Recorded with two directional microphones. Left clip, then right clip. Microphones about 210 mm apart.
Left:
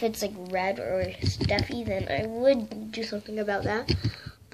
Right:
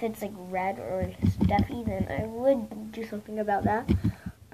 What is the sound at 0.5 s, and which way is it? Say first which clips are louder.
A woman's voice: left 2 dB; 10° right (ahead or behind).